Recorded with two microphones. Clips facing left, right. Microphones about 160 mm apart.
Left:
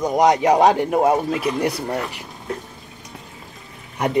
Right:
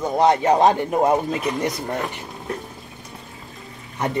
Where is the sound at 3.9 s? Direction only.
15° left (ahead or behind).